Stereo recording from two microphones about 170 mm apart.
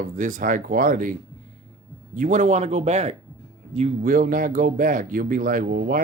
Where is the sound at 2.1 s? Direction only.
50° right (ahead or behind).